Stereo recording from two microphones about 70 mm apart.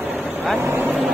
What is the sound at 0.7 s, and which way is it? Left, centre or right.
Vehicle, right.